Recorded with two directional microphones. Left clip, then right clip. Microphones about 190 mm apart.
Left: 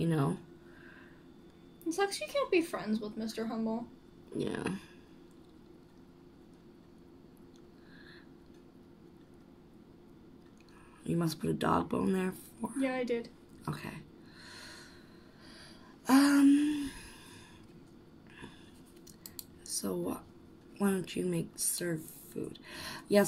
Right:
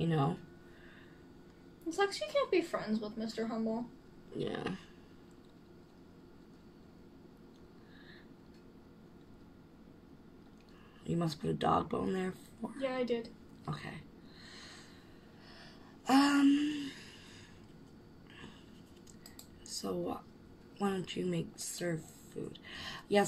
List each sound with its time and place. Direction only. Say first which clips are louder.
0.0 s a sound: left 1 dB; 35° left (ahead or behind)
1.9 s speech: left 1 dB; 55° left (ahead or behind)
4.4 s speech: left 2 dB; 40° left (ahead or behind)
11.1 s speech: left 2 dB; 35° left (ahead or behind)
12.8 s a woman's voice: left 1 dB; 50° left (ahead or behind)
16.3 s speech: left 3 dB; 35° left (ahead or behind)
19.6 s speech: left 2 dB; 40° left (ahead or behind)